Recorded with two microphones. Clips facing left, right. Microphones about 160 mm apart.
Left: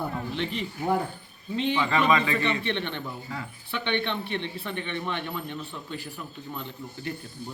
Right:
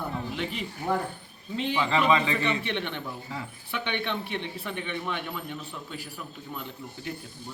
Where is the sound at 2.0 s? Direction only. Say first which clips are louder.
Right 1 dB; 10° right (ahead or behind).